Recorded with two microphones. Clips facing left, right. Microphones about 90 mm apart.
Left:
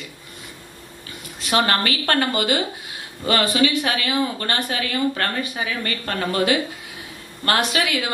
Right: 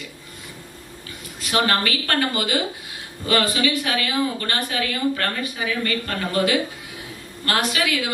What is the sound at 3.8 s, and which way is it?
Speech, 40° left (ahead or behind).